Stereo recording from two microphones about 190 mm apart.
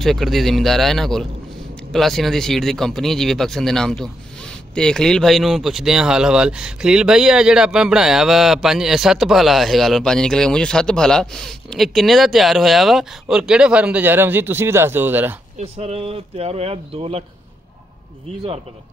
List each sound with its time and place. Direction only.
0.0 s speech: centre (ahead or behind)
15.6 s speech: 30° right (ahead or behind)